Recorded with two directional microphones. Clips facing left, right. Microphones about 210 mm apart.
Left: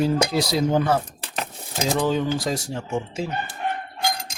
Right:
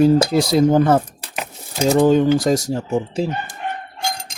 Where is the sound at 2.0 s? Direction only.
45° right (ahead or behind).